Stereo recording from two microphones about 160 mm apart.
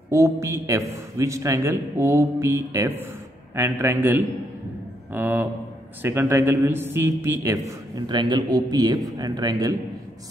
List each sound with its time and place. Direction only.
0.1 s a man's voice: 20° right (ahead or behind)